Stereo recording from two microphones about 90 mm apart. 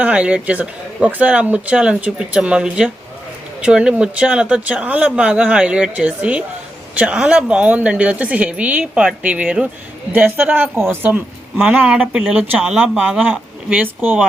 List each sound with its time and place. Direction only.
0.0 s speech: 15° right (ahead or behind)